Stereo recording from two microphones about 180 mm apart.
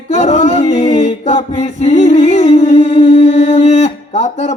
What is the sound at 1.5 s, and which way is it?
Singing, 40° left (ahead or behind).